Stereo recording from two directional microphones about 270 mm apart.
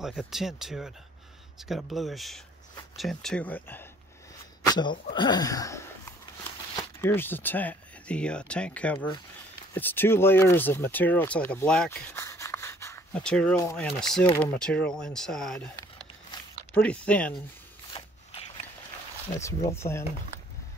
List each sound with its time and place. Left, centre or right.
0.0 s speech: centre
17.9 s a sound: centre
19.7 s speech: centre